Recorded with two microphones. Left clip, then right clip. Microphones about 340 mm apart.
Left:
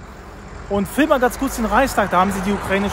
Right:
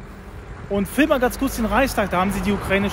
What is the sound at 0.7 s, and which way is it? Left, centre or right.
Speech, centre.